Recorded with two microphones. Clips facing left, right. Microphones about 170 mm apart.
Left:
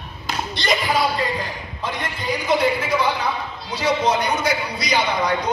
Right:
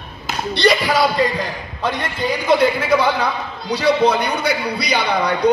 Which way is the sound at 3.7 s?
65° right (ahead or behind).